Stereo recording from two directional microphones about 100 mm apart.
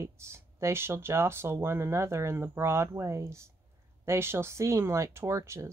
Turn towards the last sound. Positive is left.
turn(degrees=-30)  # may be behind; listen again after turning